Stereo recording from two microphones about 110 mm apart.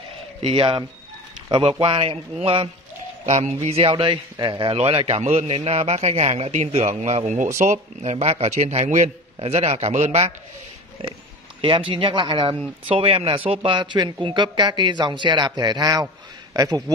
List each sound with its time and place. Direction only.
0.4 s speech: 55° right (ahead or behind)
3.3 s a man's voice: 90° right
3.6 s a man's voice: 60° right (ahead or behind); by 10.3 s 85° right
11.6 s a man's voice: 50° right (ahead or behind); by 16.9 s 35° right (ahead or behind)